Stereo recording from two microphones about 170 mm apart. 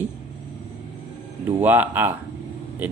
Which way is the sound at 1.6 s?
10° right (ahead or behind).